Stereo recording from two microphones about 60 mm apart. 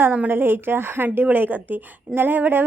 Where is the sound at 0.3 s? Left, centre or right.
Right.